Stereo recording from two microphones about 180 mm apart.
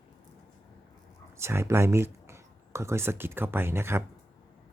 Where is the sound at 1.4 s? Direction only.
15° right (ahead or behind).